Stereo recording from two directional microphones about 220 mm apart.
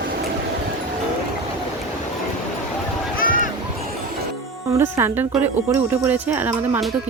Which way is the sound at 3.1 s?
40° left (ahead or behind).